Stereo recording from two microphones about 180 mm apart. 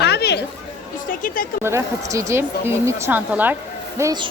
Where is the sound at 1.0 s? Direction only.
50° left (ahead or behind).